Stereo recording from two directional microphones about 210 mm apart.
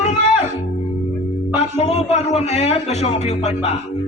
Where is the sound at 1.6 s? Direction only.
30° left (ahead or behind).